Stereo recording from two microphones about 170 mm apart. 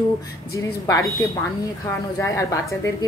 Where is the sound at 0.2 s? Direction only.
20° left (ahead or behind).